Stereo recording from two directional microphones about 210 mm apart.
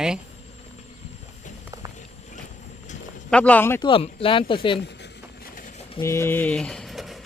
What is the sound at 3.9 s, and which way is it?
Speech, 25° left (ahead or behind).